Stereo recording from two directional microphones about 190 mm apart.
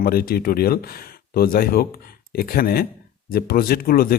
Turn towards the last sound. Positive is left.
turn(degrees=50)  # may be behind; listen again after turning